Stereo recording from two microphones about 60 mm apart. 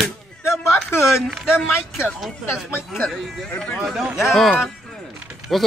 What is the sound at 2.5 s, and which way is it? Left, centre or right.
Speech, left.